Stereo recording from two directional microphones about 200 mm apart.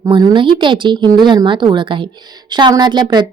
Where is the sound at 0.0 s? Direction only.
20° right (ahead or behind).